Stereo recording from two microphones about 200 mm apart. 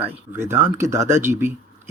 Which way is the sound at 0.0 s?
10° right (ahead or behind).